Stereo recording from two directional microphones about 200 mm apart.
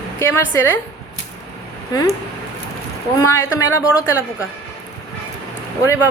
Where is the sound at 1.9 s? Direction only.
20° left (ahead or behind).